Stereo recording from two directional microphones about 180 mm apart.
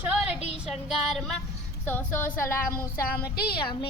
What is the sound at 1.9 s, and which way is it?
Speech, 10° left (ahead or behind).